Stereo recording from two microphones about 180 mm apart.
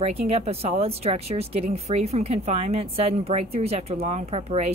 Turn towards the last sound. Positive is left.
turn(degrees=-35)  # may be behind; listen again after turning